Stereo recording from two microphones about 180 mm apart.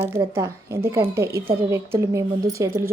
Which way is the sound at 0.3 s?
15° right (ahead or behind).